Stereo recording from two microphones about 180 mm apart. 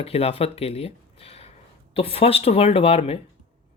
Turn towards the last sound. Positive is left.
turn(degrees=35)  # may be behind; listen again after turning